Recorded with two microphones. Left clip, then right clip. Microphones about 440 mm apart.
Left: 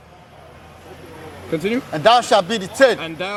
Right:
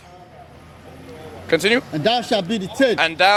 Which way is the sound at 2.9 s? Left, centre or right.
Right.